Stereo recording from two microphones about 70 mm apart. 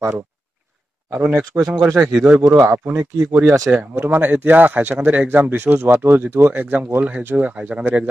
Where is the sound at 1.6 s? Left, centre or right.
Centre.